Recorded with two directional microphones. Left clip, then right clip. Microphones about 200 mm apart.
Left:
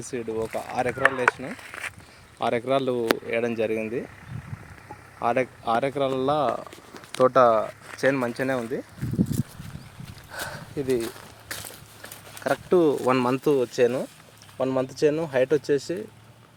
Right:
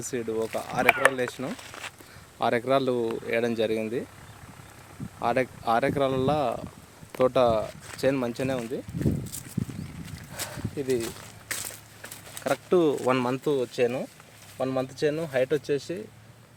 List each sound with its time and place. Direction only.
0.0 s speech: centre (ahead or behind)
1.5 s speech: 20° left (ahead or behind)
2.4 s speech: centre (ahead or behind)
5.2 s speech: centre (ahead or behind); by 8.8 s 25° left (ahead or behind)
9.0 s a sound: 25° left (ahead or behind)
10.3 s a sound: 30° left (ahead or behind)
10.8 s speech: 25° left (ahead or behind)
11.4 s a sound: 5° left (ahead or behind)
12.3 s speech: 5° left (ahead or behind)
13.4 s speech: 30° left (ahead or behind)